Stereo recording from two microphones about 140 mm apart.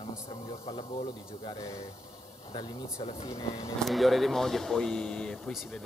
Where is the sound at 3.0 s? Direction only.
50° left (ahead or behind).